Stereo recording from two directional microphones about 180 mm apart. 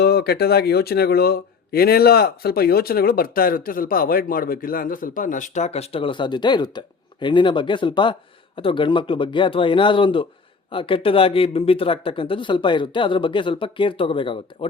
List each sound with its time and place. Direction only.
0.0 s speech: 60° left (ahead or behind); by 14.7 s 30° left (ahead or behind)